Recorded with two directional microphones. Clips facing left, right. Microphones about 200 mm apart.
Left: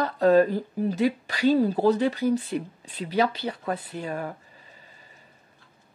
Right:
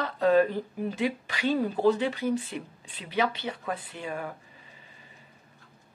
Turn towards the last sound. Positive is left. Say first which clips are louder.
# left 4 dB
turn(degrees=40)  # may be behind; listen again after turning